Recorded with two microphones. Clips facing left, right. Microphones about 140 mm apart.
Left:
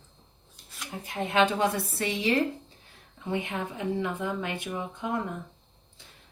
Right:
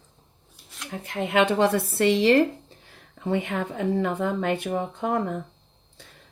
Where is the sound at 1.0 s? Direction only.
65° right (ahead or behind).